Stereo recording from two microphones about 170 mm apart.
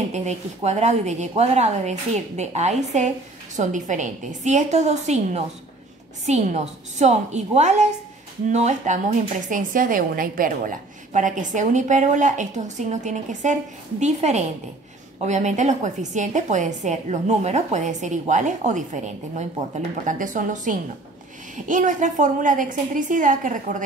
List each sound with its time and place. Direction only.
0.1 s a woman's voice: 40° right (ahead or behind)